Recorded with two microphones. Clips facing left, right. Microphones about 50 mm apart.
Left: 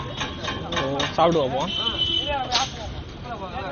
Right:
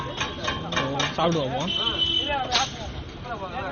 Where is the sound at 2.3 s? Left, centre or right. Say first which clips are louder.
Even; centre.